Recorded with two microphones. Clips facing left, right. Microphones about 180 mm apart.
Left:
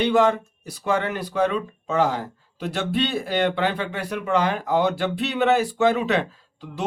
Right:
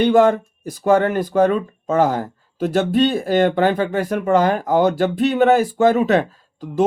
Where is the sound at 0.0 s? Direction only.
50° right (ahead or behind).